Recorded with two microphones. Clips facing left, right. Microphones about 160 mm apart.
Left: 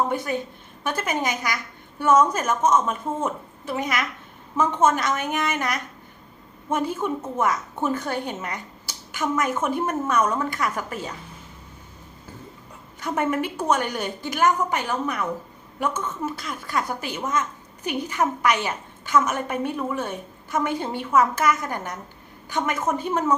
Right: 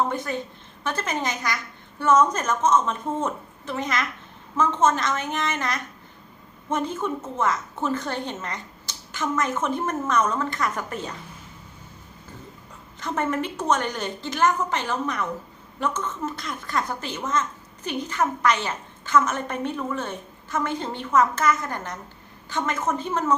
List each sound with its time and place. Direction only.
0.1 s a woman's voice: 10° left (ahead or behind)
13.0 s a woman's voice: 10° left (ahead or behind)